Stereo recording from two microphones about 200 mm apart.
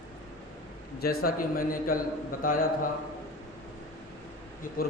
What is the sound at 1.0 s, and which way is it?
A man's voice, 50° left (ahead or behind).